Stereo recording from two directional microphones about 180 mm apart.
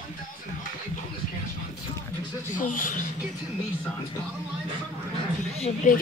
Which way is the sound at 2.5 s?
50° left (ahead or behind).